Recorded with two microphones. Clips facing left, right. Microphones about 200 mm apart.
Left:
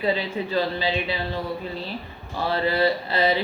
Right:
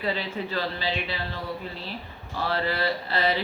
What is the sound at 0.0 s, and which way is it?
Speech, 15° left (ahead or behind).